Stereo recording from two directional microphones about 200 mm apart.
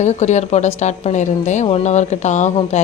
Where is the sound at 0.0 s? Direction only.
35° left (ahead or behind).